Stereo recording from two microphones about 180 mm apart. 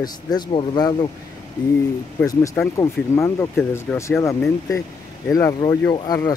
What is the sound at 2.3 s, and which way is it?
Speech, 15° left (ahead or behind).